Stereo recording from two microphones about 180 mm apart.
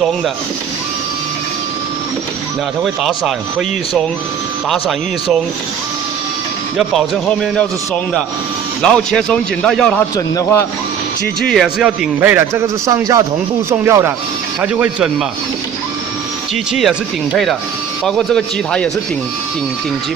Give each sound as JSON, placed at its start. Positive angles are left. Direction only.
{"t": 2.8, "sound": "a man's voice", "side_deg": 0}
{"t": 6.8, "sound": "a man's voice", "side_deg": 5}
{"t": 10.1, "sound": "a man's voice", "side_deg": 20}
{"t": 11.4, "sound": "a man's voice", "side_deg": 0}
{"t": 16.7, "sound": "a man's voice", "side_deg": 0}